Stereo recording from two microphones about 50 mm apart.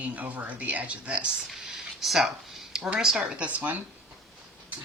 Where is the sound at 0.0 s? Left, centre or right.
Right.